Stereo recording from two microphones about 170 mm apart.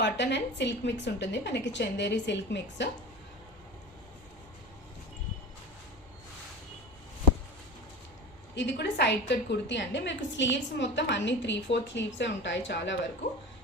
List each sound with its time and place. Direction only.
0.0 s a woman's voice: 90° left
8.5 s a woman's voice: 90° left